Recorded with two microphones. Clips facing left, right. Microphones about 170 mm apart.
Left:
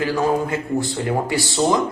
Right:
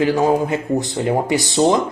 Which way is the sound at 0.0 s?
20° right (ahead or behind).